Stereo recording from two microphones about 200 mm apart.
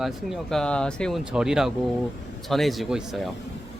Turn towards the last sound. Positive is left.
turn(degrees=0)  # may be behind; listen again after turning